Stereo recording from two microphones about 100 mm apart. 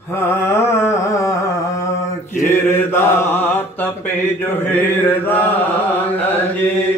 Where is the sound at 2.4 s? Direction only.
25° left (ahead or behind).